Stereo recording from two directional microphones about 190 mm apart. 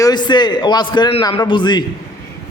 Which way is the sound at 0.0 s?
20° left (ahead or behind).